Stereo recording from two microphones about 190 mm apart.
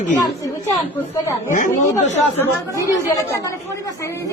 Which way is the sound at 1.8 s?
40° left (ahead or behind).